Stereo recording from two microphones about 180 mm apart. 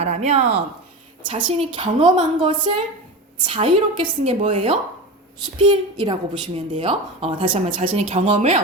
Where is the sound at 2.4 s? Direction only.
25° right (ahead or behind).